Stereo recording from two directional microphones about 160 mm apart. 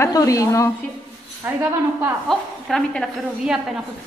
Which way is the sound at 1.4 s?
10° right (ahead or behind).